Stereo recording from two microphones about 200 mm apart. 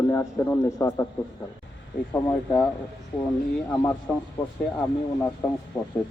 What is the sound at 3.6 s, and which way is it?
Speech, 10° left (ahead or behind).